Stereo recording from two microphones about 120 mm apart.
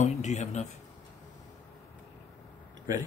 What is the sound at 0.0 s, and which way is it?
Speech, 75° left (ahead or behind).